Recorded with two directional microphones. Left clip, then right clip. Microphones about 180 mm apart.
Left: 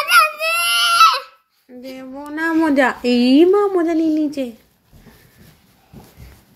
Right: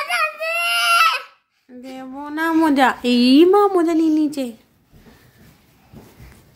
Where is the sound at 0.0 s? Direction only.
5° left (ahead or behind).